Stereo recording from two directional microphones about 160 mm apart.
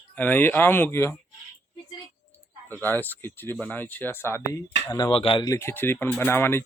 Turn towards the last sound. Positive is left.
turn(degrees=15)  # may be behind; listen again after turning